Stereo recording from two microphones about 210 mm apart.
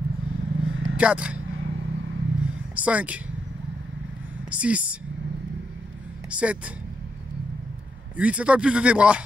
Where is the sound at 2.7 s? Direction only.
5° right (ahead or behind).